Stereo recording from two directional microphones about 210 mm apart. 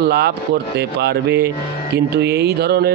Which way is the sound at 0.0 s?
50° right (ahead or behind).